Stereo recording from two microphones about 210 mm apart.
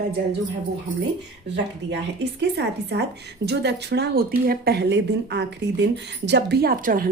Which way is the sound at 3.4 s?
50° right (ahead or behind).